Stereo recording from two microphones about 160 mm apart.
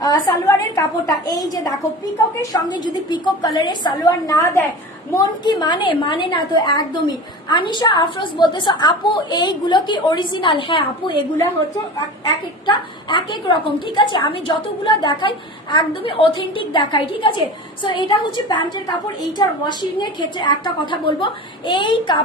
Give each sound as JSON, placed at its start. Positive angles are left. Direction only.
{"t": 0.0, "sound": "a woman's voice", "side_deg": 25}
{"t": 12.6, "sound": "a woman's voice", "side_deg": 30}